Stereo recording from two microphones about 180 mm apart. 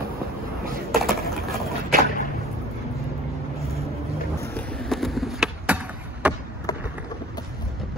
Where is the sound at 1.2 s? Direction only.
Centre (ahead or behind).